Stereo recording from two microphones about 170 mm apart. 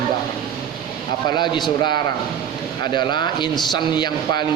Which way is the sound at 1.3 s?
25° left (ahead or behind).